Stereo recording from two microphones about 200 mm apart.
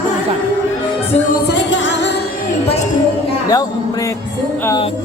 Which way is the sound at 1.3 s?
60° left (ahead or behind).